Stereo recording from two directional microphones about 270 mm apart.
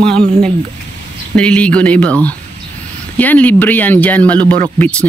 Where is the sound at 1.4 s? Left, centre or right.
Centre.